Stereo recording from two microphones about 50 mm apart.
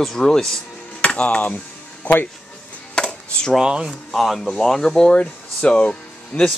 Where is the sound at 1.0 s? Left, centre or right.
Left.